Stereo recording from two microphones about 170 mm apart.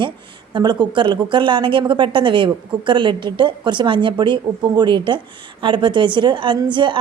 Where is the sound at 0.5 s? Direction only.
25° right (ahead or behind).